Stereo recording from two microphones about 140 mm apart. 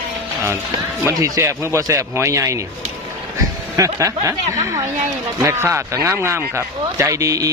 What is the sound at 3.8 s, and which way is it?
Speech, 20° right (ahead or behind).